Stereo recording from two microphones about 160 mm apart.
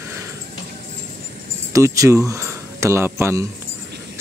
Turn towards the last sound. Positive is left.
turn(degrees=-15)  # may be behind; listen again after turning